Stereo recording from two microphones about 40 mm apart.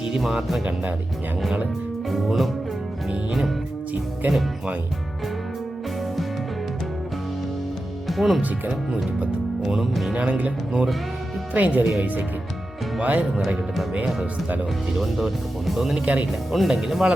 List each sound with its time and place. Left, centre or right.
0.2 s speech: centre
2.0 s speech: centre
4.2 s speech: right
8.0 s music: centre
9.7 s speech: centre
10.2 s speech: right
11.5 s speech: right
13.0 s speech: right
14.9 s speech: centre
16.0 s speech: right
16.5 s speech: centre